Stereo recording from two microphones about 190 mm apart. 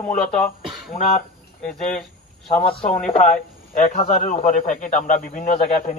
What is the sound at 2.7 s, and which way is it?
Speech, 30° left (ahead or behind).